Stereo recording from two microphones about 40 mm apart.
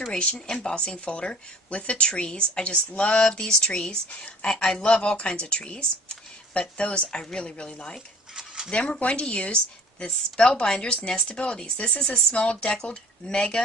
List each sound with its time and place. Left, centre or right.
0.1 s speech: left
2.9 s a sound: left
3.3 s speech: left